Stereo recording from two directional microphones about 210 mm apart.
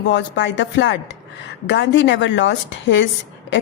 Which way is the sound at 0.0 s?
60° left (ahead or behind).